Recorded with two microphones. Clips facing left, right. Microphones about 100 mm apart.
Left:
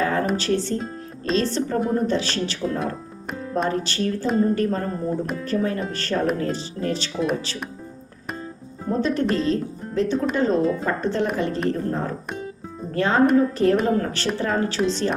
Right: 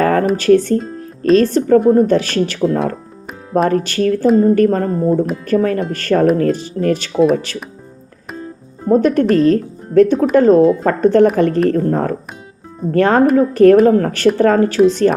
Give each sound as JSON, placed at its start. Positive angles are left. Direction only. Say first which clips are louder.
{"t": 0.0, "sound": "music", "louder": "right 8 dB", "side_deg": -55}
{"t": 0.3, "sound": "speech", "louder": "right 11 dB", "side_deg": -50}
{"t": 8.9, "sound": "a woman's voice", "louder": "right 10 dB", "side_deg": -55}